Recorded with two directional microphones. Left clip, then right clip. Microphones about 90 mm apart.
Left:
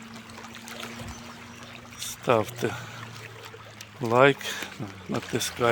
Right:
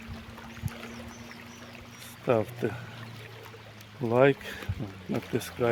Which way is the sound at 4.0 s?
Centre (ahead or behind).